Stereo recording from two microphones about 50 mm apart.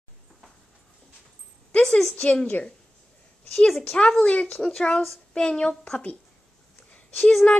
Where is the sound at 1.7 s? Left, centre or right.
Left.